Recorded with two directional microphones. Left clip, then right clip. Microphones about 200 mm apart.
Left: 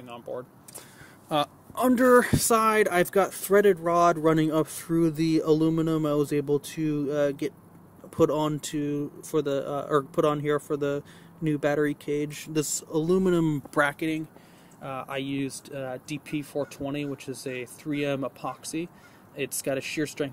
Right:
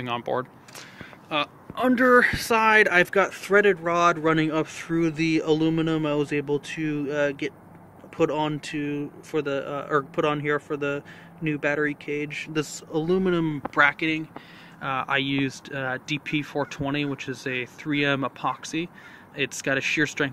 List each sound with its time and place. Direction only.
0.0 s speech: centre (ahead or behind)
1.3 s speech: 25° left (ahead or behind); by 20.2 s 5° left (ahead or behind)